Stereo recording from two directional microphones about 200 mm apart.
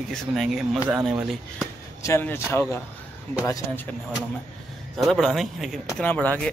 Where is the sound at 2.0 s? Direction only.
10° left (ahead or behind).